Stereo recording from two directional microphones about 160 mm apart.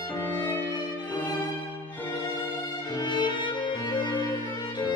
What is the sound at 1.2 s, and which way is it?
Violin, 10° left (ahead or behind).